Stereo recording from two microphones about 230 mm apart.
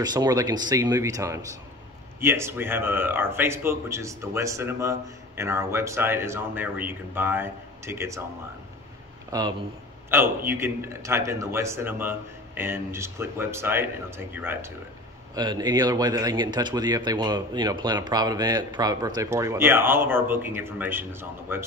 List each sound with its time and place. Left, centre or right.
0.0 s a man's voice: centre
9.3 s a man's voice: centre